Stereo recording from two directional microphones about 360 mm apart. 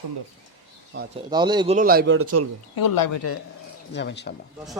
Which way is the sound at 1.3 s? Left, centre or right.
Centre.